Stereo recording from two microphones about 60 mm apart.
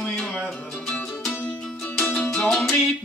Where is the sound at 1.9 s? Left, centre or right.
Centre.